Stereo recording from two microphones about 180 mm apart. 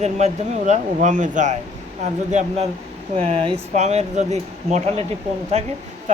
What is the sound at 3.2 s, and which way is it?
Speech, 30° right (ahead or behind).